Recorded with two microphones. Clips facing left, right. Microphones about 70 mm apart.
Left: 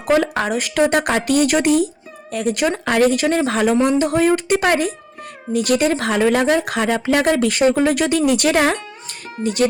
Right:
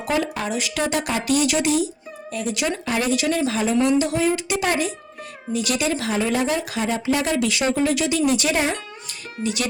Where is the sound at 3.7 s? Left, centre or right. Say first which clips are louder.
Left 3 dB; left.